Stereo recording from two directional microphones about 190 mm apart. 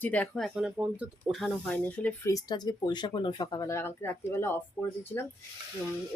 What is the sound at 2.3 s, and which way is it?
Speech, 20° left (ahead or behind).